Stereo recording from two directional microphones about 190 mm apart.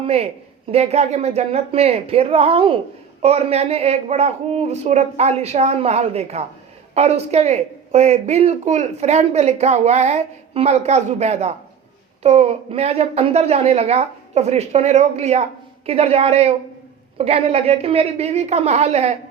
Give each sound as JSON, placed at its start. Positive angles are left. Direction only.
{"t": 0.0, "sound": "speech", "side_deg": -30}